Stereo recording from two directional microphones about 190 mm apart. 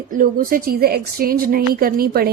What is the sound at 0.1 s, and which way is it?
A woman's voice, 45° right (ahead or behind).